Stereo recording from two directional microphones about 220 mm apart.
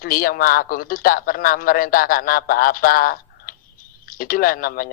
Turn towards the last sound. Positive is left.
turn(degrees=40)  # may be behind; listen again after turning